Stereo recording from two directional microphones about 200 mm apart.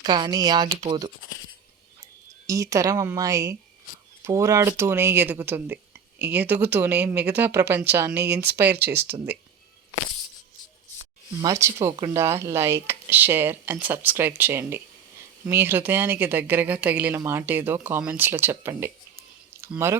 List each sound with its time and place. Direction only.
0.0 s speech: 20° right (ahead or behind)
2.5 s speech: 15° right (ahead or behind)
8.2 s speech: 55° right (ahead or behind)
8.4 s speech: 10° right (ahead or behind)
11.4 s speech: 15° right (ahead or behind)